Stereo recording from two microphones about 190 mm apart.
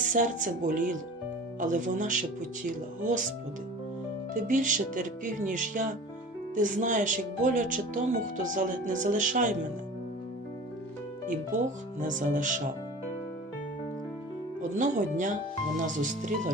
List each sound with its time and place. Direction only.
0.1 s speech: 40° right (ahead or behind)
4.4 s speech: 40° right (ahead or behind)
12.0 s speech: 40° right (ahead or behind)
14.6 s speech: 40° right (ahead or behind)